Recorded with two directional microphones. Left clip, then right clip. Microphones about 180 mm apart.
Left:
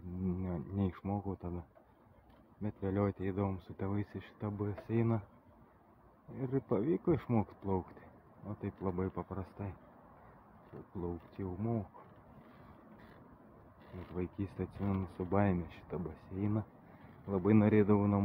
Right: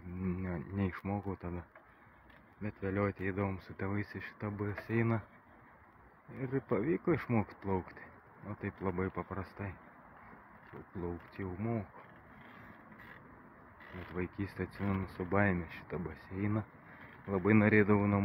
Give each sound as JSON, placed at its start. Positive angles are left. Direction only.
{"t": 0.2, "sound": "a sound", "side_deg": 15}
{"t": 1.3, "sound": "speech", "side_deg": 10}
{"t": 2.6, "sound": "speech", "side_deg": 20}
{"t": 6.4, "sound": "speech", "side_deg": 15}
{"t": 11.0, "sound": "speech", "side_deg": 15}
{"t": 13.9, "sound": "speech", "side_deg": 10}